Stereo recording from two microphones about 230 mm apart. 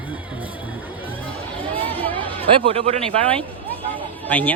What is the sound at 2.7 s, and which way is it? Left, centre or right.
Speech, right.